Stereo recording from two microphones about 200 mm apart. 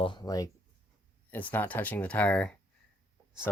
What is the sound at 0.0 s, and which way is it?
Speech, 20° left (ahead or behind).